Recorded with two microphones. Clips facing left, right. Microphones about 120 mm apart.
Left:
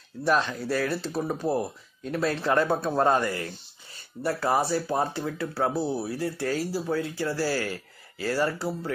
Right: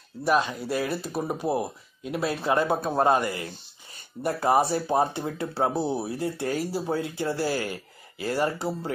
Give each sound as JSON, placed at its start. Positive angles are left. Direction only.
{"t": 0.2, "sound": "speech", "side_deg": -10}